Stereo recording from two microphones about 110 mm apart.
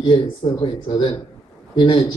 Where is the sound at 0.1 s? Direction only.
50° left (ahead or behind).